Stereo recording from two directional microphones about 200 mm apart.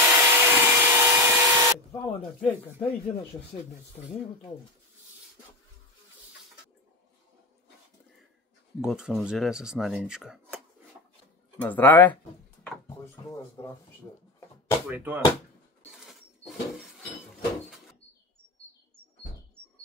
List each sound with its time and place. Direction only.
0.0 s a sound: 10° right (ahead or behind)
2.0 s speech: 5° left (ahead or behind)
8.8 s speech: 5° right (ahead or behind)
11.6 s speech: 10° left (ahead or behind)
14.9 s speech: 10° right (ahead or behind)
16.1 s a sound: centre (ahead or behind)